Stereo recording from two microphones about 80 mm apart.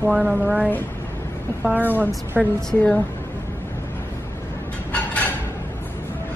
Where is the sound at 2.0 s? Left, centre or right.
Right.